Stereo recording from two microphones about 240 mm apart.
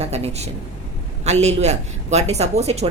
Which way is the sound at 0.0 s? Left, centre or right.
Right.